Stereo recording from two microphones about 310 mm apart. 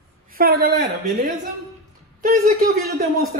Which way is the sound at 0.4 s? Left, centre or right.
Right.